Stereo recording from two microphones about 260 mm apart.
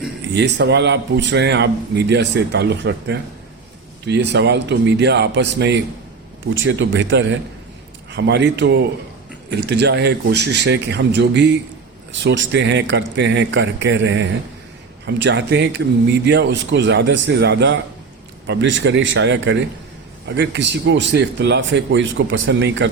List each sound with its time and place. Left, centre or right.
0.3 s a man's voice: right